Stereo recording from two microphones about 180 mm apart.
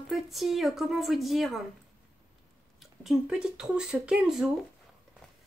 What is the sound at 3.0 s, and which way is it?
A woman's voice, 5° right (ahead or behind).